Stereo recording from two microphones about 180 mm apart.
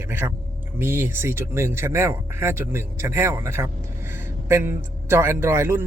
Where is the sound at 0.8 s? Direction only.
15° right (ahead or behind).